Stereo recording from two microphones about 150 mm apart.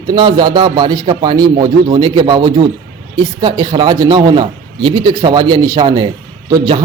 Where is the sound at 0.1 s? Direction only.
30° right (ahead or behind).